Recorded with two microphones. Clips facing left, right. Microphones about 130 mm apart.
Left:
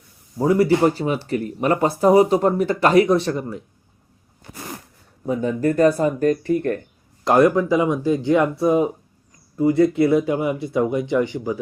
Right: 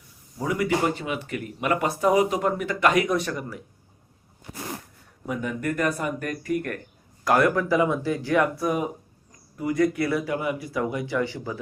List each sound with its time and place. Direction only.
0.3 s speech: 35° left (ahead or behind)
5.2 s speech: 30° left (ahead or behind)